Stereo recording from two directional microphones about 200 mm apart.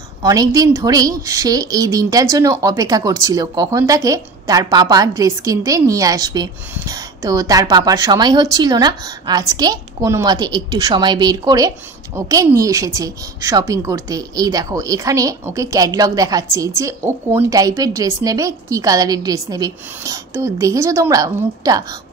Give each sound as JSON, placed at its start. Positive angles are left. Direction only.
{"t": 0.2, "sound": "a woman's voice", "side_deg": -15}